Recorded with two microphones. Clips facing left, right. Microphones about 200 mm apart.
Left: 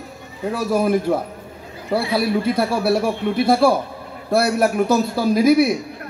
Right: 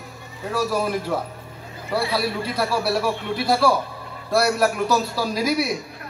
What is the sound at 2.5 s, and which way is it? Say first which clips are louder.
A man's voice: left 4 dB; 55° left (ahead or behind).